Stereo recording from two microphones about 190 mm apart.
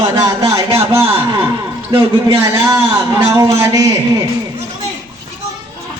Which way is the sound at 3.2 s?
20° right (ahead or behind).